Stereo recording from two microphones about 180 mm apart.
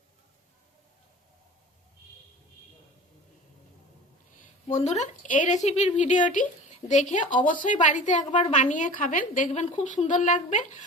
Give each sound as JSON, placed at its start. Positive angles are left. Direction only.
{"t": 4.7, "sound": "speech", "side_deg": 40}